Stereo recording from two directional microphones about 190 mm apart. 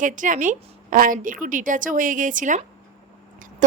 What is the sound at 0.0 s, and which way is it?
A woman's voice, 45° right (ahead or behind).